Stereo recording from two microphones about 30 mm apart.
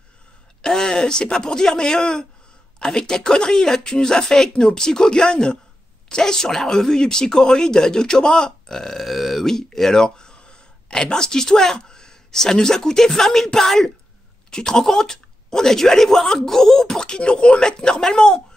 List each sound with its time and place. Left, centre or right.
0.6 s speech: left
9.0 s speech: centre
9.5 s speech: centre
14.5 s speech: left
17.0 s speech: left